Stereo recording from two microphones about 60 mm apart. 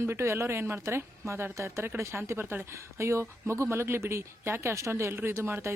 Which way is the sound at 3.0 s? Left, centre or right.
Right.